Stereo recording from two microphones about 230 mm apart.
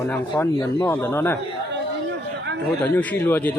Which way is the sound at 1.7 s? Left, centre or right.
Right.